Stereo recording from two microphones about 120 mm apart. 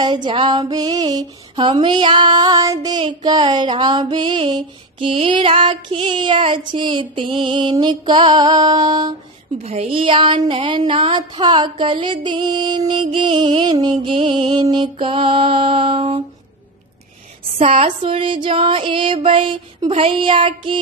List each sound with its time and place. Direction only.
0.0 s female singing: 40° right (ahead or behind)
9.6 s music: 55° right (ahead or behind)
10.9 s female singing: 45° right (ahead or behind)
14.0 s music: 45° right (ahead or behind)
17.6 s music: 55° right (ahead or behind)